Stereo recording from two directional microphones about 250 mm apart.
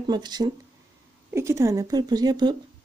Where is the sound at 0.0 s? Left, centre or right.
Centre.